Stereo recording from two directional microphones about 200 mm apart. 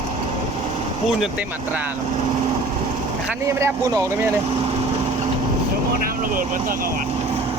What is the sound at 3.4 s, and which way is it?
Speech, 15° right (ahead or behind).